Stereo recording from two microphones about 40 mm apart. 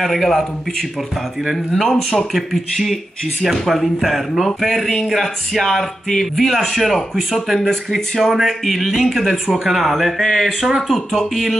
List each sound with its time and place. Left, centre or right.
0.0 s speech: centre